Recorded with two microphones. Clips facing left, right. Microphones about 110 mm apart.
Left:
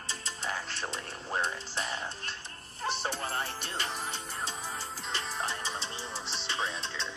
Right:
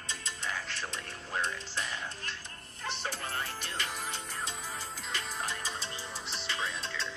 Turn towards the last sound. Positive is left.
turn(degrees=25)  # may be behind; listen again after turning